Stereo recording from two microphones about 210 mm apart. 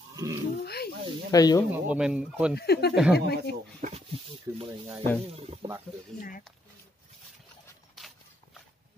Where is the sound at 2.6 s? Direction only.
50° left (ahead or behind).